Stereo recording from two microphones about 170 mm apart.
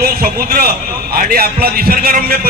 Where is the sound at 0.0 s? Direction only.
60° right (ahead or behind).